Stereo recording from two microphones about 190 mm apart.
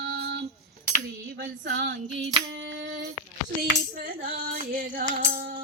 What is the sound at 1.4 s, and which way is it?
Female singing, 65° right (ahead or behind).